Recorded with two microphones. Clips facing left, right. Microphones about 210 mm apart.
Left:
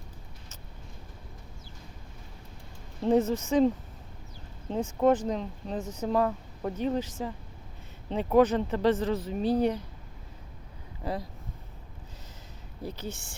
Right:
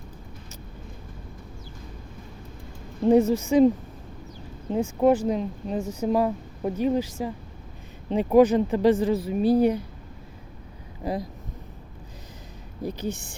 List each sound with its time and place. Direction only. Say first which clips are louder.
3.0 s speech: right 6 dB; 10° right (ahead or behind)
4.7 s speech: right 4 dB; 10° right (ahead or behind)
11.0 s speech: right 5 dB; 15° right (ahead or behind)
12.8 s speech: right 7 dB; 15° right (ahead or behind)